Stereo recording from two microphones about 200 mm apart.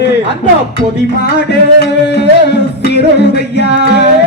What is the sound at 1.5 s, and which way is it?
Music, 60° left (ahead or behind).